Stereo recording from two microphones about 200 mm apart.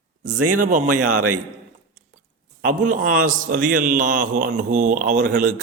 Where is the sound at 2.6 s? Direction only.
40° right (ahead or behind).